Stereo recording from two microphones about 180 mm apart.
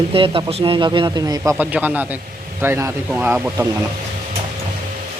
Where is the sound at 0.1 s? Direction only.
30° right (ahead or behind).